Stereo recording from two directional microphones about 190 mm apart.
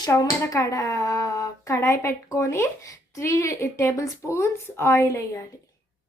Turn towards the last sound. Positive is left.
turn(degrees=15)  # may be behind; listen again after turning